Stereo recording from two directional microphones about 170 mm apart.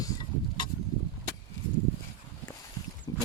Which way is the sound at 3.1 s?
20° left (ahead or behind).